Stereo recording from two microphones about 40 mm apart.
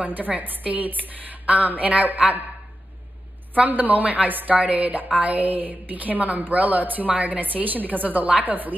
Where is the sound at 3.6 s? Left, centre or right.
Right.